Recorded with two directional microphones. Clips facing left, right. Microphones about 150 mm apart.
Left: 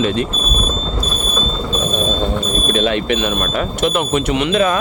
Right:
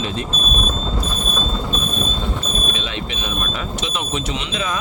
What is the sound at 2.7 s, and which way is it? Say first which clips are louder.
Speech: left 11 dB; 55° left (ahead or behind).